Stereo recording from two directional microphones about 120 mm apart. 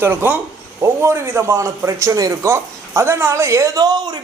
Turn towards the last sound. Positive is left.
turn(degrees=-35)  # may be behind; listen again after turning